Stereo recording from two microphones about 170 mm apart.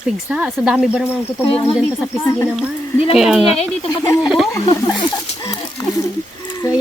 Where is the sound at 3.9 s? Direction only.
15° left (ahead or behind).